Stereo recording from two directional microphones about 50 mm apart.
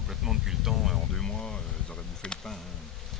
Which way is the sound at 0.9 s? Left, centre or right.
Centre.